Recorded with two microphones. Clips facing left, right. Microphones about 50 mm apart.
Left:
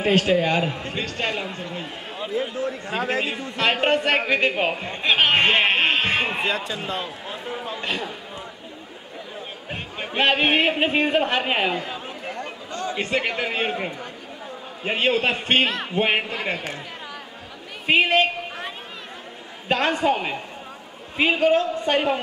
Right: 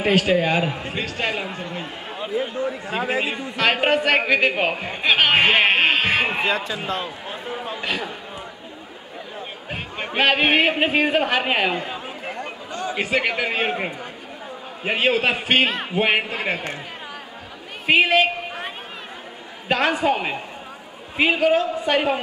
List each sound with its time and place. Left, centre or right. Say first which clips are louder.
0.0 s a man's voice: right 1 dB; centre
9.7 s a man's voice: right 2 dB; centre
17.8 s a man's voice: right 2 dB; centre
19.7 s a man's voice: right 1 dB; centre